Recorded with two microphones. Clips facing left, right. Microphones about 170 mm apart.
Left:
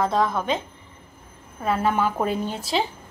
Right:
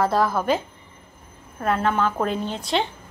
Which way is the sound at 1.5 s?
10° left (ahead or behind).